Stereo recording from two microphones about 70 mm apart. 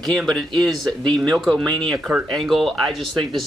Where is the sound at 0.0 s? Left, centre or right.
Centre.